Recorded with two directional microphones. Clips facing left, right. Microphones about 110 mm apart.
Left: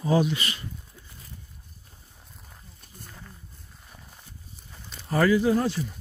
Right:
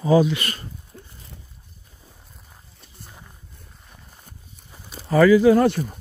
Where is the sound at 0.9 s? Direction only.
60° right (ahead or behind).